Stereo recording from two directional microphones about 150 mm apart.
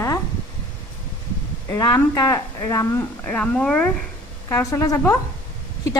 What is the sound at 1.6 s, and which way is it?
Speech, 25° left (ahead or behind).